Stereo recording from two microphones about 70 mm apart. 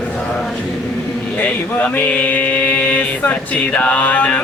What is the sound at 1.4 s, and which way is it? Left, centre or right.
Mantra, left.